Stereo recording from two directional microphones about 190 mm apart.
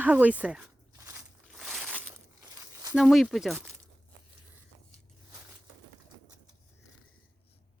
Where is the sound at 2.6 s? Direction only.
15° right (ahead or behind).